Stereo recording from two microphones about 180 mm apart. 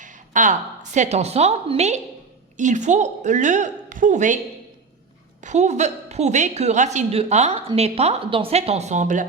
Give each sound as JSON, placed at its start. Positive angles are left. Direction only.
{"t": 0.0, "sound": "a woman's voice", "side_deg": -45}
{"t": 5.4, "sound": "a woman's voice", "side_deg": -40}